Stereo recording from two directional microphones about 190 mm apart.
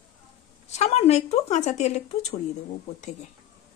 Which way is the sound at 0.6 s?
35° left (ahead or behind).